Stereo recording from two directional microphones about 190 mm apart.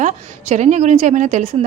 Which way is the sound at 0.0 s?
40° right (ahead or behind).